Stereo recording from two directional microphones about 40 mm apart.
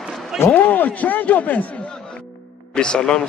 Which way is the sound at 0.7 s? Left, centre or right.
Left.